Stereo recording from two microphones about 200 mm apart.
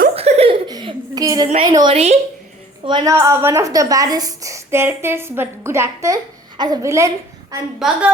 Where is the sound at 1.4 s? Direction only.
30° right (ahead or behind).